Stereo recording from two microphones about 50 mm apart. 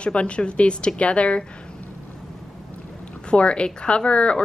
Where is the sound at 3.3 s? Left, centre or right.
Left.